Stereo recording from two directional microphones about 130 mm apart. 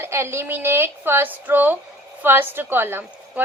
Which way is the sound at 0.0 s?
20° right (ahead or behind).